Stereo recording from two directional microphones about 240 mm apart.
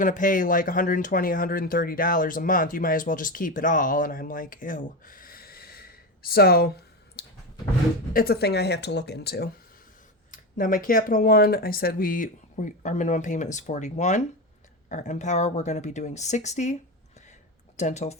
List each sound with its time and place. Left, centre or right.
0.0 s speech: left
7.2 s clicking: left
8.1 s speech: left
17.7 s speech: left